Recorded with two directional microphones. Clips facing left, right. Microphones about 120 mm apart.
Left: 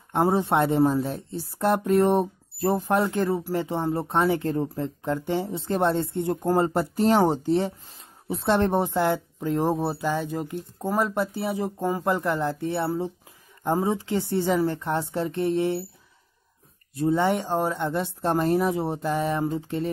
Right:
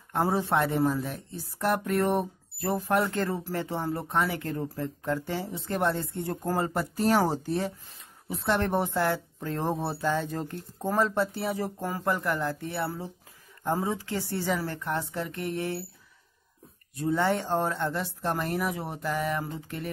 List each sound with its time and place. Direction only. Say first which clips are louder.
0.1 s a woman's voice: left 4 dB; 20° left (ahead or behind)
16.9 s a woman's voice: left 4 dB; 25° left (ahead or behind)